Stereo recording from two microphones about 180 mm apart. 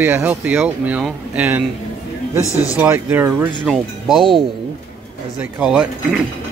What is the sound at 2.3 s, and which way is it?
Speech, 15° left (ahead or behind).